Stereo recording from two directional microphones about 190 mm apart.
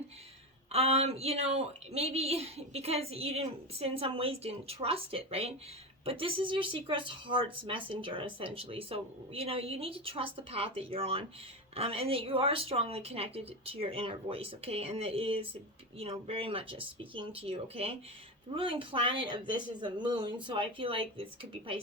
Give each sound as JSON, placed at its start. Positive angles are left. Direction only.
{"t": 0.7, "sound": "speech", "side_deg": -30}